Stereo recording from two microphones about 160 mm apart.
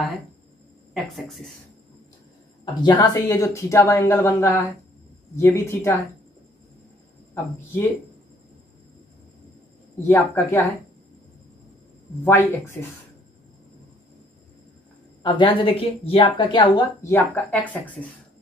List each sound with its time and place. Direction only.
0.9 s speech: centre (ahead or behind)
2.6 s speech: 25° left (ahead or behind)
10.0 s speech: 15° left (ahead or behind)
12.3 s speech: 15° left (ahead or behind)
15.2 s speech: 30° left (ahead or behind)
17.0 s speech: 15° left (ahead or behind)